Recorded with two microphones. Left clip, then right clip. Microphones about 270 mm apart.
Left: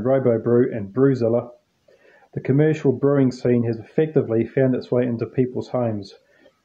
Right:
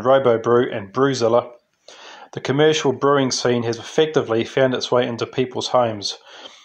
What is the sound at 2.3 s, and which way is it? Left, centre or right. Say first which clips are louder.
Speech: right 4 dB; centre.